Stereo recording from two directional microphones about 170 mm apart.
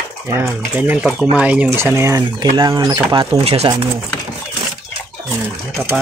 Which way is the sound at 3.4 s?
35° right (ahead or behind).